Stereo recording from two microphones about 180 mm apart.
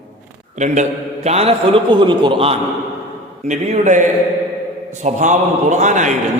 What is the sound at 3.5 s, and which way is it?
A man's voice, 40° right (ahead or behind).